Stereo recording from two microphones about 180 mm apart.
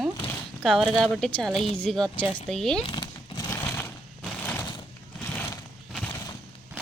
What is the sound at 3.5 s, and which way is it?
Sewing machine, 10° left (ahead or behind).